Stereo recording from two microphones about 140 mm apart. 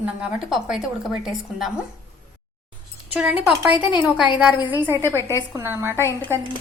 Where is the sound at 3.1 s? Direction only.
10° right (ahead or behind).